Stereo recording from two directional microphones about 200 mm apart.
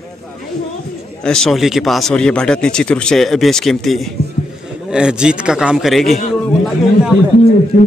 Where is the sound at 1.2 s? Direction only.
Centre (ahead or behind).